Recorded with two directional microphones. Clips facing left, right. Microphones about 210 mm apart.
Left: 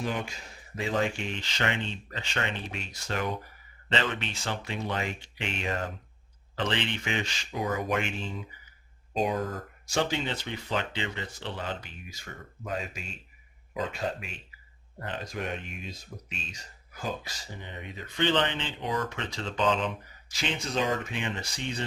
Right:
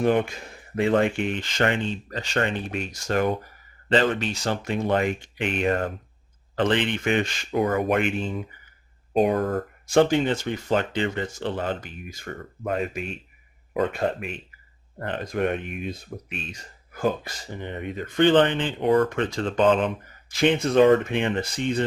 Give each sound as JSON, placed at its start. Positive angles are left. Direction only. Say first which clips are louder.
{"t": 0.0, "sound": "speech", "louder": "right 11 dB", "side_deg": -55}